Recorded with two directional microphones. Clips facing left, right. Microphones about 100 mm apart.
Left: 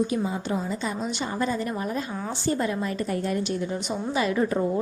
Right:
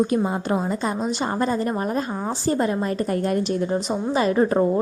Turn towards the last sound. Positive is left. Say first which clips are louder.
# right 5 dB
turn(degrees=-35)  # may be behind; listen again after turning